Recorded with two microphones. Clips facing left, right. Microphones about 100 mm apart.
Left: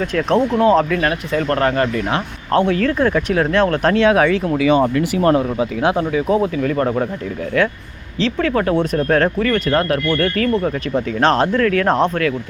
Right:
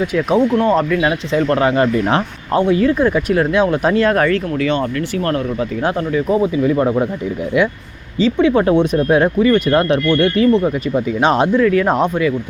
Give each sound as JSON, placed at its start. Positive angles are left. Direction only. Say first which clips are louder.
{"t": 0.0, "sound": "speech", "louder": "right 2 dB", "side_deg": -10}
{"t": 2.5, "sound": "speech", "louder": "right 2 dB", "side_deg": -5}
{"t": 4.9, "sound": "speech", "louder": "left 4 dB", "side_deg": 20}
{"t": 5.8, "sound": "speech", "louder": "even", "side_deg": 5}
{"t": 6.6, "sound": "speech", "louder": "right 3 dB", "side_deg": -10}
{"t": 8.4, "sound": "speech", "louder": "right 4 dB", "side_deg": -20}